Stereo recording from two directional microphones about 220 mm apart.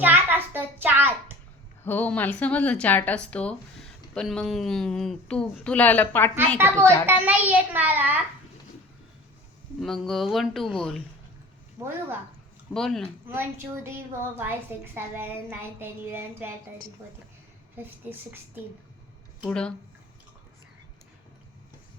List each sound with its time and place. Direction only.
0.0 s hands: 10° right (ahead or behind)
1.8 s a woman's voice: 10° left (ahead or behind)
6.6 s a woman's voice: 10° right (ahead or behind)
9.8 s speech: centre (ahead or behind)
11.8 s a woman's voice: 10° right (ahead or behind)
12.7 s speech: centre (ahead or behind)
13.2 s a woman's voice: 10° right (ahead or behind)
19.5 s speech: 5° left (ahead or behind)